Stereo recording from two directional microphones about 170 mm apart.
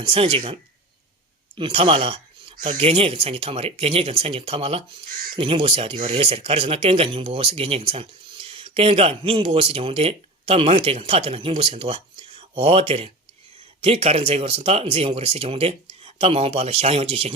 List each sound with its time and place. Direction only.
0.1 s speech: 35° right (ahead or behind)
1.5 s speech: 30° right (ahead or behind)